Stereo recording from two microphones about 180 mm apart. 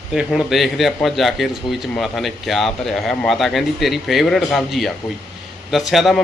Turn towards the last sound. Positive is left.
turn(degrees=0)  # may be behind; listen again after turning